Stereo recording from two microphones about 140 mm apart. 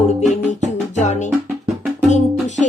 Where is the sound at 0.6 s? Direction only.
55° left (ahead or behind).